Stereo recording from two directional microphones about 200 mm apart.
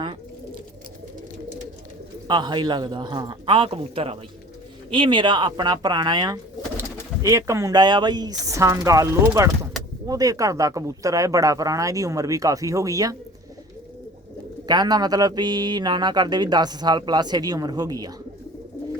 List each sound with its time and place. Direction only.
2.2 s speech: 20° right (ahead or behind)
14.7 s speech: 20° right (ahead or behind)